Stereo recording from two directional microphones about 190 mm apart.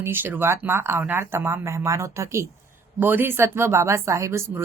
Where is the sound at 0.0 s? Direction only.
10° right (ahead or behind).